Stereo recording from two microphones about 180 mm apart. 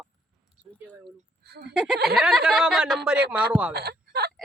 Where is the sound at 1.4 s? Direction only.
65° right (ahead or behind).